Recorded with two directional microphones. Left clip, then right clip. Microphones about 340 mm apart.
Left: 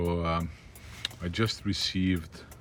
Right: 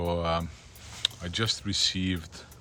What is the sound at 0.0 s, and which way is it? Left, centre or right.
Vehicle, centre.